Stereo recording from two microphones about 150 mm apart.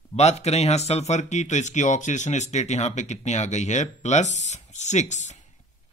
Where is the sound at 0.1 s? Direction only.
45° left (ahead or behind).